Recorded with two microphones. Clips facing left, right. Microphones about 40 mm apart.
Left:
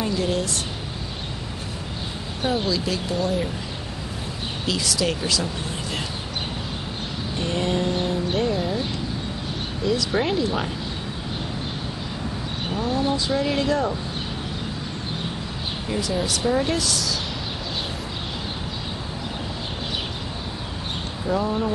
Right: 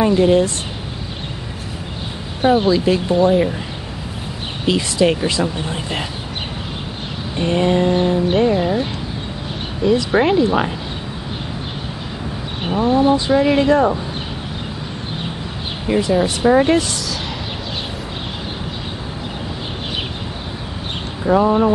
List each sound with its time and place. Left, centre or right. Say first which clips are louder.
0.0 s speech: right 11 dB; right
2.4 s speech: right 10 dB; right
4.6 s speech: right 9 dB; right
7.3 s speech: right 8 dB; right
9.8 s speech: right 8 dB; right
12.6 s speech: right 10 dB; right
15.9 s speech: right 9 dB; right
21.3 s speech: right 10 dB; right